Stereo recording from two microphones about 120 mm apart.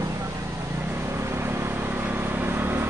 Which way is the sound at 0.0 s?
25° right (ahead or behind).